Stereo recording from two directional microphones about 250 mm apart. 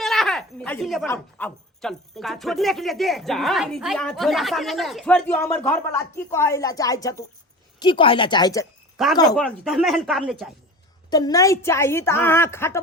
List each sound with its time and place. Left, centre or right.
0.0 s a sound: centre
1.0 s a woman's voice: centre
9.0 s speech: centre
11.1 s a woman's voice: centre